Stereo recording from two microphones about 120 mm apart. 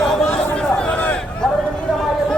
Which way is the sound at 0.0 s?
5° left (ahead or behind).